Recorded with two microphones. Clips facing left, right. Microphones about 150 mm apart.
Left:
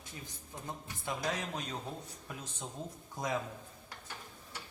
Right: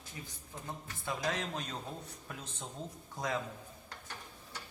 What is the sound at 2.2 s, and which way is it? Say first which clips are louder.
Speech: left 1 dB; 15° left (ahead or behind).